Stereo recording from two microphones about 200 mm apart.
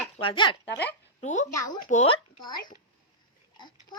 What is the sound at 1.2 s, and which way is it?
Speech, 35° left (ahead or behind).